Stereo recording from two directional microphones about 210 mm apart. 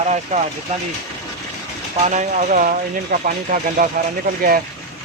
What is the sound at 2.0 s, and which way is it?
Speech, 35° right (ahead or behind).